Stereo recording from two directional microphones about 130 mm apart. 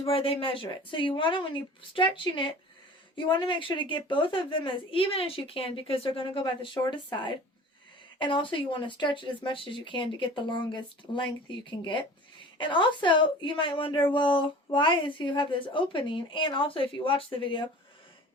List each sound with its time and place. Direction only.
0.0 s a woman's voice: 45° left (ahead or behind)